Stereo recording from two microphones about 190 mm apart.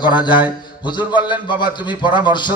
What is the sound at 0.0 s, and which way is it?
A man's voice, 25° left (ahead or behind).